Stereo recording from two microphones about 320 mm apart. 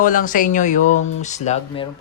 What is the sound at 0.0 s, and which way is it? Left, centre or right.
Speech, left.